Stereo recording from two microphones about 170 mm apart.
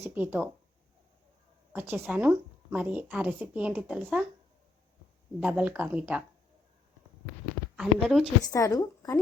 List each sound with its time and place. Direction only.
0.0 s a woman's voice: 10° right (ahead or behind)
1.7 s a woman's voice: 10° right (ahead or behind)
5.4 s a woman's voice: 10° right (ahead or behind)
7.8 s speech: centre (ahead or behind)
8.4 s a woman's voice: 20° left (ahead or behind)